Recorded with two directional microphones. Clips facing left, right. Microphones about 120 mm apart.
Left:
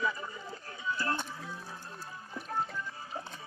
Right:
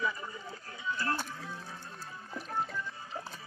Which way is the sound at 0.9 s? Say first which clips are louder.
Even; 25° left (ahead or behind).